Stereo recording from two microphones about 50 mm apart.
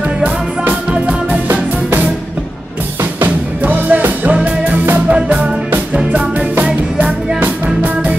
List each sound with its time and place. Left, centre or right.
0.2 s music: right
3.3 s music: right
6.6 s music: right
7.3 s music: right